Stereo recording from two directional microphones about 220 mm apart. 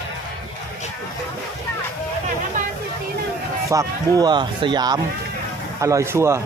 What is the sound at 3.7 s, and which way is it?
Speech, 15° right (ahead or behind).